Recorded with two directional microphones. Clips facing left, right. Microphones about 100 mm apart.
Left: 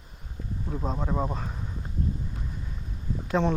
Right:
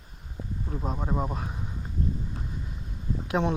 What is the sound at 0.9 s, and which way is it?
Speech, 5° right (ahead or behind).